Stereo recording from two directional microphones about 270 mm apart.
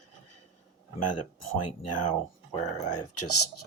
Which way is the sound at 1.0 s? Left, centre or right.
Left.